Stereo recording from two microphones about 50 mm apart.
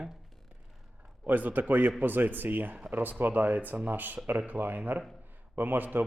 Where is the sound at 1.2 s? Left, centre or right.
Right.